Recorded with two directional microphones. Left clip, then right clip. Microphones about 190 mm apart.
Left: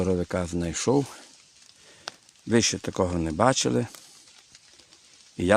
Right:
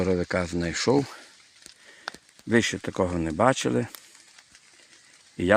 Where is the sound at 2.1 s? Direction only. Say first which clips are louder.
Right 2 dB; 30° left (ahead or behind).